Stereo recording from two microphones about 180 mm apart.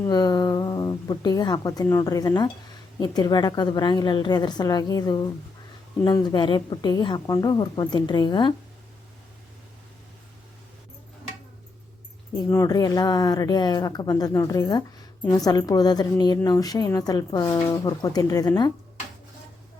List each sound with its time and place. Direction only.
0.0 s a woman's voice: 20° left (ahead or behind)
12.5 s a woman's voice: 20° left (ahead or behind)